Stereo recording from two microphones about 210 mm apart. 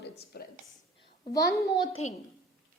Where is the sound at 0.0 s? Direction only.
50° left (ahead or behind).